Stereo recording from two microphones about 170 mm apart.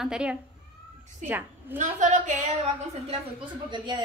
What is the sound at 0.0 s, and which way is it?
A woman's voice, 5° right (ahead or behind).